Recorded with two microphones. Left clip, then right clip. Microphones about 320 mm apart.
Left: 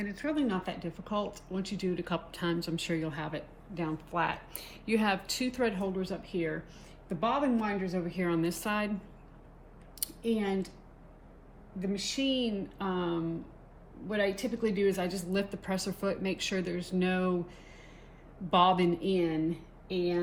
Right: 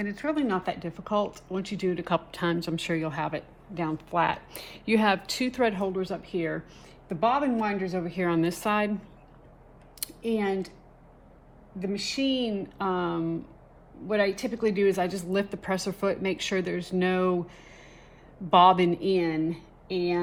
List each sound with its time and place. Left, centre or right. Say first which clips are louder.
0.0 s speech: right 4 dB; right
10.0 s speech: right 4 dB; right
12.0 s speech: right 3 dB; right
18.5 s speech: right 7 dB; right